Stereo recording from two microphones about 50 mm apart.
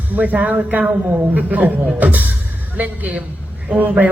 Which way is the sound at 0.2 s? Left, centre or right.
Right.